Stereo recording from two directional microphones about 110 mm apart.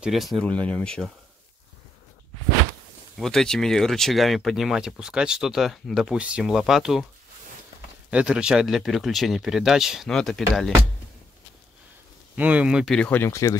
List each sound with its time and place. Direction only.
0.0 s speech: centre (ahead or behind)
0.5 s speech: 10° left (ahead or behind)
3.2 s speech: 5° left (ahead or behind)
8.1 s speech: 10° right (ahead or behind)
12.4 s speech: 15° right (ahead or behind)
13.1 s speech: 25° left (ahead or behind)